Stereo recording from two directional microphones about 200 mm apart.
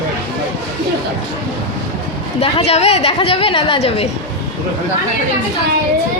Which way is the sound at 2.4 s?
30° left (ahead or behind).